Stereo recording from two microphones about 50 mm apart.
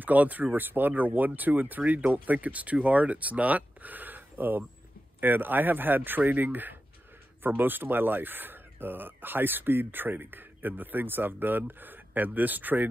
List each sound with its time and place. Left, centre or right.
0.0 s speech: right